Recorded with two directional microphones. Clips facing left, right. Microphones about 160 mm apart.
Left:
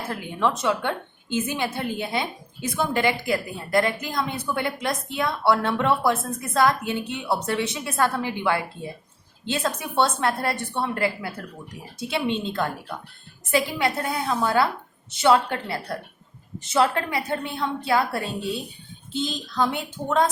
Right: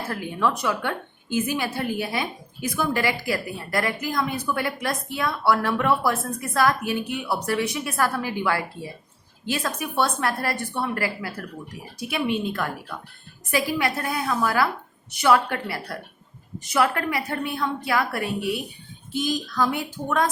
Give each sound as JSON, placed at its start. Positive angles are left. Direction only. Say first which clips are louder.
{"t": 0.1, "sound": "a woman's voice", "louder": "even", "side_deg": 20}